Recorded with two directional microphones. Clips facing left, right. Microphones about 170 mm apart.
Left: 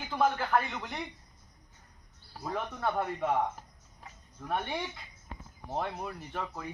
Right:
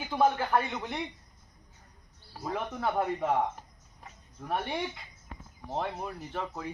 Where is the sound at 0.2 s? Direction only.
5° right (ahead or behind).